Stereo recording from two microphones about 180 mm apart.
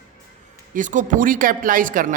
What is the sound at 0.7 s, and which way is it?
A man's voice, 45° right (ahead or behind).